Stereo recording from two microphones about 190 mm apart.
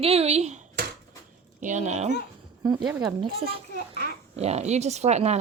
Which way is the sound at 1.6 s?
40° right (ahead or behind).